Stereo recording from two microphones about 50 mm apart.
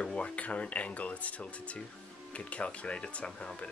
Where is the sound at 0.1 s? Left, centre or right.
Left.